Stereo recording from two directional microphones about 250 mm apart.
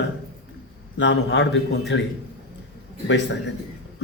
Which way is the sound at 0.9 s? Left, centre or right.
Left.